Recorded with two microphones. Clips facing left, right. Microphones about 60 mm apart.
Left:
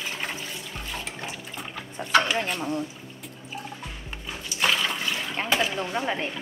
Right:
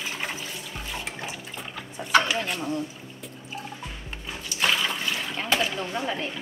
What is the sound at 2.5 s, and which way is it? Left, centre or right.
Speech, left.